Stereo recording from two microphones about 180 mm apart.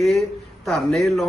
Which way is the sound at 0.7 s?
Centre (ahead or behind).